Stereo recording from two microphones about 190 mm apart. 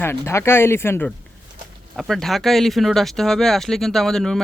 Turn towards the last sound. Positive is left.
turn(degrees=0)  # may be behind; listen again after turning